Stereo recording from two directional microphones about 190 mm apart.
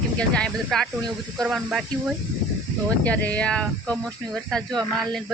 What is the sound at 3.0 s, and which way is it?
Speech, 5° left (ahead or behind).